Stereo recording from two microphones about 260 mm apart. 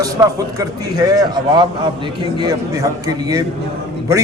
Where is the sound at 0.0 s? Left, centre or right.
Centre.